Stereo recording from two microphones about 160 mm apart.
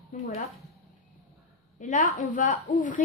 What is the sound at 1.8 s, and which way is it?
A woman's voice, 55° left (ahead or behind).